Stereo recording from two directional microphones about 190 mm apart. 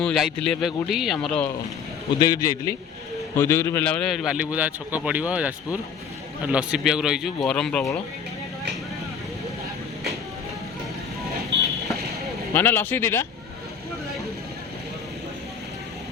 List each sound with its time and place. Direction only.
0.0 s a man's voice: centre (ahead or behind)
2.1 s a man's voice: 20° left (ahead or behind); by 7.9 s 5° left (ahead or behind)
12.5 s a man's voice: 10° left (ahead or behind)